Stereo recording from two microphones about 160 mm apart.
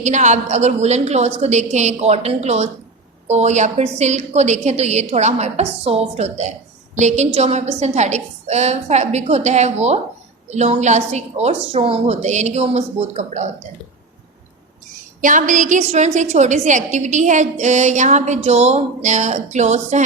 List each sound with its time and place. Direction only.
0.0 s a woman's voice: 50° right (ahead or behind)
15.2 s a woman's voice: 55° right (ahead or behind)